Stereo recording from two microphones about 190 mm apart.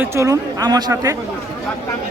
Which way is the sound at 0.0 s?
15° right (ahead or behind).